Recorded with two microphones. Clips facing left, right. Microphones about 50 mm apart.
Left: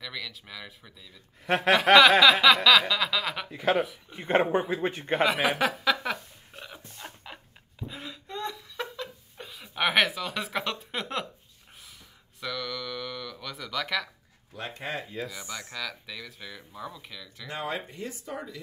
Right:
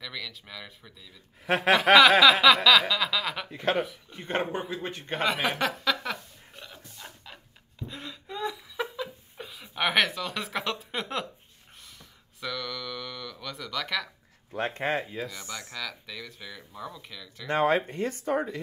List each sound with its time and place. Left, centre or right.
0.0 s a man's voice: centre
4.1 s a man's voice: centre
5.1 s a sound: centre; by 7.2 s left
7.9 s a sound: centre
12.4 s speech: centre
14.5 s speech: right
15.1 s a man's voice: centre
17.5 s speech: right